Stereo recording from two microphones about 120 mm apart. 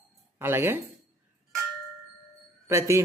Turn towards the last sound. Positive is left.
turn(degrees=-25)  # may be behind; listen again after turning